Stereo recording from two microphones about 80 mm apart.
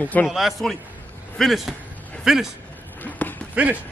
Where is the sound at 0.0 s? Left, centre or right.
Centre.